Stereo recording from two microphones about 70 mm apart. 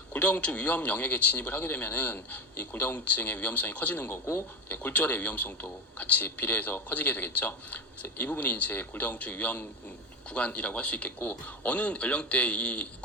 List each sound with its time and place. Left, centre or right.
0.1 s speech: left
4.0 s a man's voice: left; by 12.9 s centre